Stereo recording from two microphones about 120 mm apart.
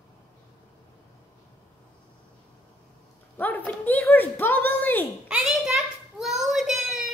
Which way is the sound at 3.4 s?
15° left (ahead or behind).